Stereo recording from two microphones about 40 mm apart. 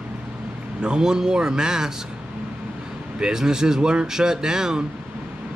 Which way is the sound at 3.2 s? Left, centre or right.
Centre.